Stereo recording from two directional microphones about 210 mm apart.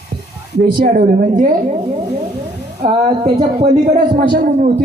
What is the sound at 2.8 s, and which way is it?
A man's voice, 25° right (ahead or behind).